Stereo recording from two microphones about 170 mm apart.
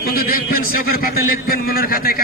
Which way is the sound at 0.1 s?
60° left (ahead or behind).